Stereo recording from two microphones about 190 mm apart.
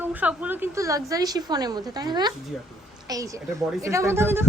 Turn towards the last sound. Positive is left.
turn(degrees=-10)  # may be behind; listen again after turning